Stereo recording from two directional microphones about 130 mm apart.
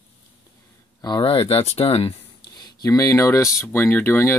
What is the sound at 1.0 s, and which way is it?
Speech, 35° left (ahead or behind).